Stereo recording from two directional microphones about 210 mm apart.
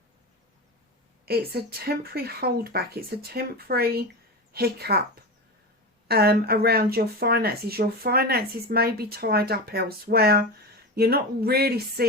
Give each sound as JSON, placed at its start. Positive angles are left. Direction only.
{"t": 1.2, "sound": "speech", "side_deg": -45}
{"t": 6.1, "sound": "speech", "side_deg": -50}